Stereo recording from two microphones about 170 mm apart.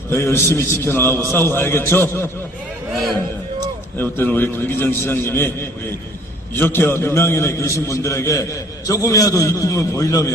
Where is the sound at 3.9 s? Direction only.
10° left (ahead or behind).